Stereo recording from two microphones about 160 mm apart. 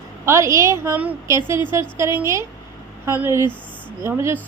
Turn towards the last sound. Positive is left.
turn(degrees=-15)  # may be behind; listen again after turning